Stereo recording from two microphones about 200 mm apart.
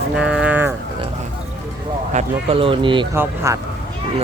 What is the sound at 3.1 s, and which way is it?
Speech, 10° right (ahead or behind).